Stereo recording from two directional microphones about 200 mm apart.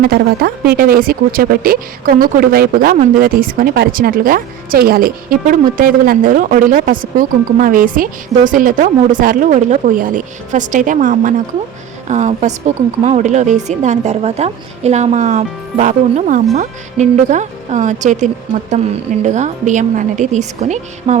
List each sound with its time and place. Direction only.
0.0 s a woman's voice: 50° right (ahead or behind)